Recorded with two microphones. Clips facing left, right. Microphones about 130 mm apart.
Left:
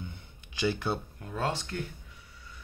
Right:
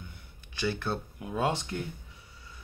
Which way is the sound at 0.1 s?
15° left (ahead or behind).